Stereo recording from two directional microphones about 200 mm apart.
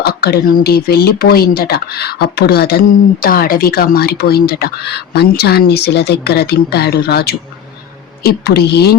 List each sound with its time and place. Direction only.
0.0 s speech: 50° left (ahead or behind)